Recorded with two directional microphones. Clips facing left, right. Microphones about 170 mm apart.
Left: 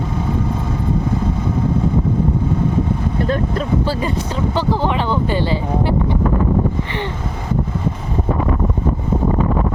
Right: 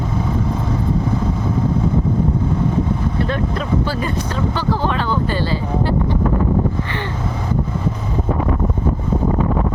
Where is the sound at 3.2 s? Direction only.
40° left (ahead or behind).